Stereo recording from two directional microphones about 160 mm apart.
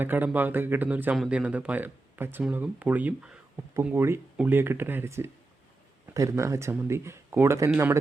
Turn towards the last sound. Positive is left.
turn(degrees=-15)  # may be behind; listen again after turning